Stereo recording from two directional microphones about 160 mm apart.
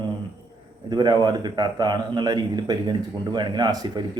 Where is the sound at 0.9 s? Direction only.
25° right (ahead or behind).